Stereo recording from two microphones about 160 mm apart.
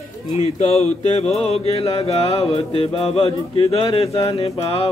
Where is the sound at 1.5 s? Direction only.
40° left (ahead or behind).